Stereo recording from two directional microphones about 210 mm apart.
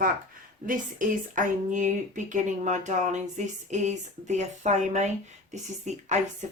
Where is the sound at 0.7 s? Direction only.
40° right (ahead or behind).